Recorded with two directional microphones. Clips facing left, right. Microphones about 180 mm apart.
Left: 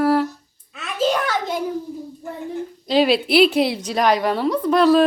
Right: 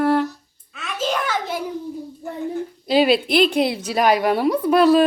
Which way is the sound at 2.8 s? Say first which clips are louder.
Even; 5° right (ahead or behind).